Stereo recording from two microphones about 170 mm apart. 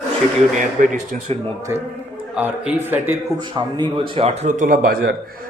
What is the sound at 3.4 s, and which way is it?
A man's voice, 25° right (ahead or behind).